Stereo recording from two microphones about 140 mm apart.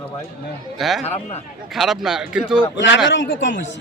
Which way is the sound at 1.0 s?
50° left (ahead or behind).